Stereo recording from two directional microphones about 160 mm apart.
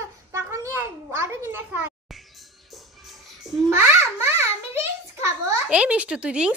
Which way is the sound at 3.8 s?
15° right (ahead or behind).